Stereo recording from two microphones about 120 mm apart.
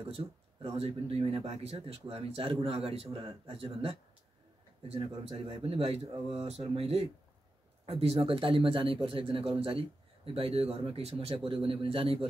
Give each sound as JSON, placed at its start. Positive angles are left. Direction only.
{"t": 0.0, "sound": "a man's voice", "side_deg": -50}